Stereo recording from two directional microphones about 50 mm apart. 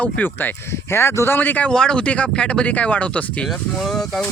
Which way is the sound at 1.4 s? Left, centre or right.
Left.